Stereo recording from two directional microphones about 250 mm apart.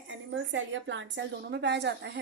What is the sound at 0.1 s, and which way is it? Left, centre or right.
A woman's voice, right.